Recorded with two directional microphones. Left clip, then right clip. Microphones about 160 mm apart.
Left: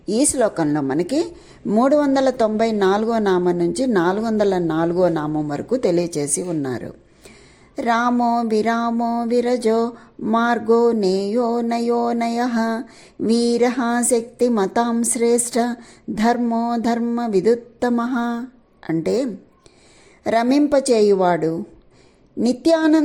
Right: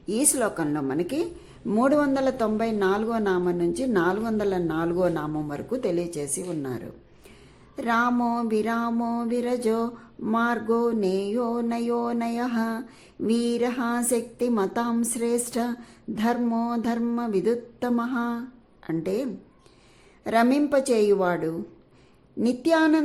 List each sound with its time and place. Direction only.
0.0 s speech: 25° left (ahead or behind)